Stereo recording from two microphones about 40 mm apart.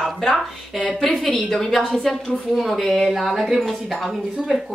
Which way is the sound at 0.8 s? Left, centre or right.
Centre.